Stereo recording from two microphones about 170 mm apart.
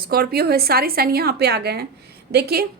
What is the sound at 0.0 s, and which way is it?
A woman's voice, 65° right (ahead or behind).